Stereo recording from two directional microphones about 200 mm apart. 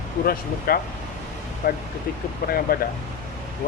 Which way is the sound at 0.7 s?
45° left (ahead or behind).